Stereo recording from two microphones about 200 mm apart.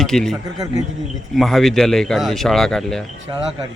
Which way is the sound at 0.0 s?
Centre (ahead or behind).